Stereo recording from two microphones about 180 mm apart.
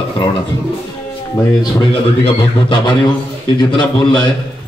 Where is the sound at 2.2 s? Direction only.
25° left (ahead or behind).